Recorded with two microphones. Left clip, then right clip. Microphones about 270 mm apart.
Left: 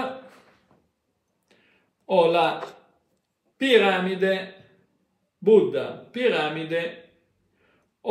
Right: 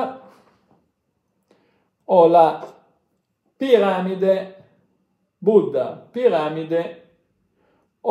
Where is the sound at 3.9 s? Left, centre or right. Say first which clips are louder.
Right 2 dB; centre.